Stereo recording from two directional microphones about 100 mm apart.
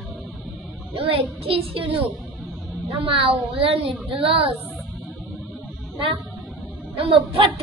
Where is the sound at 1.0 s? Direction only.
65° right (ahead or behind).